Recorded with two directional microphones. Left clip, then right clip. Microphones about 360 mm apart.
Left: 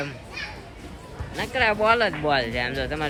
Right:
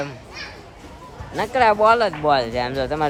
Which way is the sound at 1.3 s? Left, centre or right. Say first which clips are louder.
Right 6 dB; centre.